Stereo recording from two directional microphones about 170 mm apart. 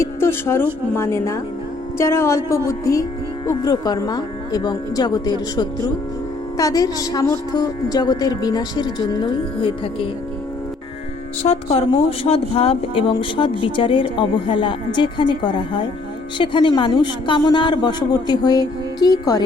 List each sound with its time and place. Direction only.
0.0 s a woman's voice: 15° left (ahead or behind); by 10.1 s 30° left (ahead or behind)
11.4 s a woman's voice: 35° left (ahead or behind)